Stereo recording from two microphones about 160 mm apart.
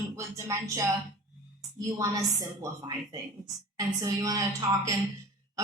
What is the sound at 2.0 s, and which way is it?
Speech, 20° right (ahead or behind).